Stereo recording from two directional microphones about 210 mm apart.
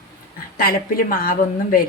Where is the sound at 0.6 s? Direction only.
45° left (ahead or behind).